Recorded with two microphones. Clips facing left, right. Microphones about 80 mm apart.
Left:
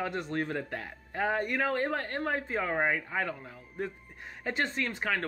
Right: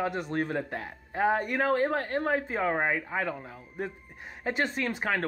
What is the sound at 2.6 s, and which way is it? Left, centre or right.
Speech, right.